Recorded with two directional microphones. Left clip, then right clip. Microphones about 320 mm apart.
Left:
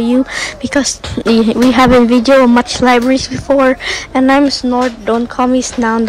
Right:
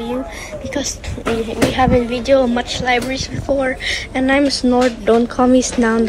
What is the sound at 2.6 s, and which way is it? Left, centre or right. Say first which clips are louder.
Speech: left 7 dB; left.